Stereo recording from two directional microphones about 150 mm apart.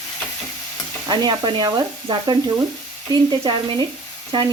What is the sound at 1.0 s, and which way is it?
Frying, 25° right (ahead or behind).